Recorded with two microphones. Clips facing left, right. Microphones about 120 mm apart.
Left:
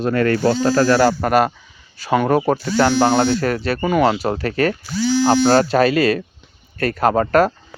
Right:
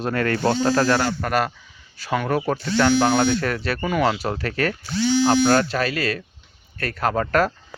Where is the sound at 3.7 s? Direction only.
20° left (ahead or behind).